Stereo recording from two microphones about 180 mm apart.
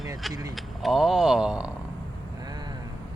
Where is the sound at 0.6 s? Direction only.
Centre (ahead or behind).